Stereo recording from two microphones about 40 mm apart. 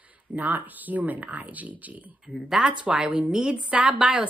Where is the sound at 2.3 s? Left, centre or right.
Left.